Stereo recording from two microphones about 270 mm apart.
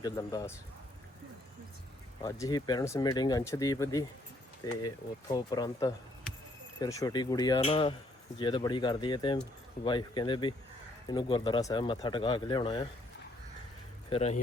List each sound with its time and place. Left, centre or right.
0.0 s speech: centre
2.2 s speech: centre
14.1 s speech: left